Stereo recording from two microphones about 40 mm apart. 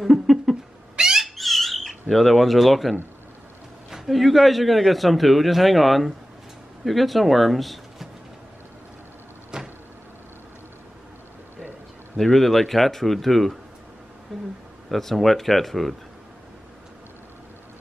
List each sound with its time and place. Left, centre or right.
0.0 s a sound: centre
0.9 s bird: centre
1.2 s a sound: centre
3.9 s a man's voice: centre
9.5 s vehicle: centre
12.2 s a man's voice: centre